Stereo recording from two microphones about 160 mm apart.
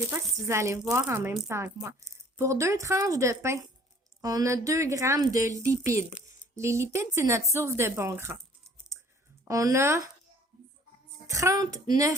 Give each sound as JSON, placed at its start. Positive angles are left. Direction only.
{"t": 0.4, "sound": "a woman's voice", "side_deg": -15}
{"t": 9.4, "sound": "speech", "side_deg": -20}
{"t": 11.3, "sound": "speech", "side_deg": -20}